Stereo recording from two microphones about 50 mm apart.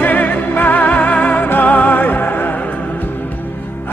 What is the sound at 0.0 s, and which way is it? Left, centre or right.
Music, left.